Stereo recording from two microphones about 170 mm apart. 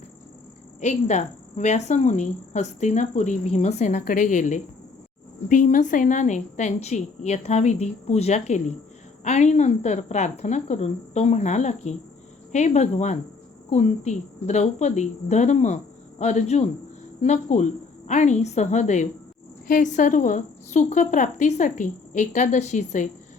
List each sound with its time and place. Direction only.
0.8 s speech: 45° left (ahead or behind)